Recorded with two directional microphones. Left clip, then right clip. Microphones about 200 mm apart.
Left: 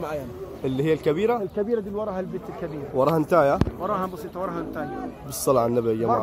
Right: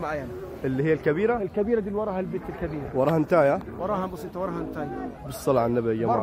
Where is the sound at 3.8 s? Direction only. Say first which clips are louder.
Left 2 dB; 55° right (ahead or behind).